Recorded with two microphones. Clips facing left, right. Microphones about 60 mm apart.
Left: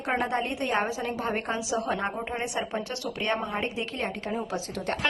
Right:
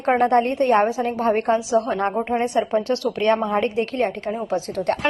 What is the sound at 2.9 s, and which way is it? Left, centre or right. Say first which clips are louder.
Speech: right 10 dB; right.